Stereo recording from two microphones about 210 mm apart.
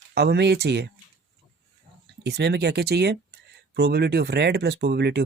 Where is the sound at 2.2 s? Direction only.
50° right (ahead or behind).